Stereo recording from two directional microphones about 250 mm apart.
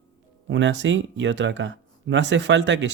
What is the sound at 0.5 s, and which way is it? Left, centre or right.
Speech, right.